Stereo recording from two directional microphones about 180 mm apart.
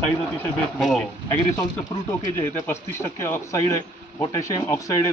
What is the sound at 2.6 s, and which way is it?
Speech, 15° left (ahead or behind).